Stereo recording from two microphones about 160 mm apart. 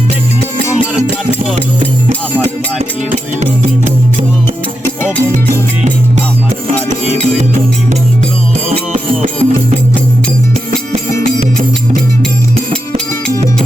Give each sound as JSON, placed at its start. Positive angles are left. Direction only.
{"t": 3.1, "sound": "music", "side_deg": -50}
{"t": 7.3, "sound": "music", "side_deg": -50}